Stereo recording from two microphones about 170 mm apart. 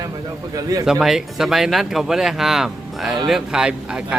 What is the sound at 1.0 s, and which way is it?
Speech, centre (ahead or behind).